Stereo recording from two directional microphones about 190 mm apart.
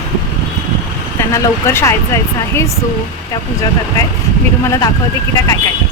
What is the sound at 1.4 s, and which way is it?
Speech, 15° left (ahead or behind).